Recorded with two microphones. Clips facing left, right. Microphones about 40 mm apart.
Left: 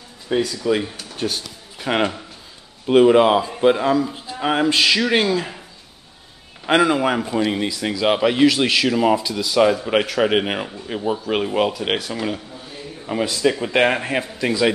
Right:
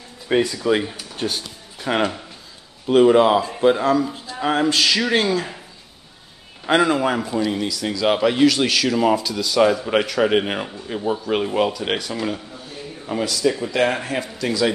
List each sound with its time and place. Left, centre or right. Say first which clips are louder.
0.3 s speech: right 2 dB; right
0.6 s speech: right 1 dB; centre
1.8 s speech: left 1 dB; centre
5.2 s speech: left 1 dB; centre
6.6 s speech: left 1 dB; centre
7.3 s speech: left 1 dB; left; by 12.4 s centre
13.2 s speech: left 1 dB; left
13.9 s a man's voice: left 2 dB; left